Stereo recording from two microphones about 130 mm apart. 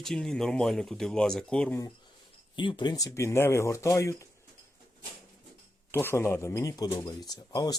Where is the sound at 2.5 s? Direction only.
40° left (ahead or behind).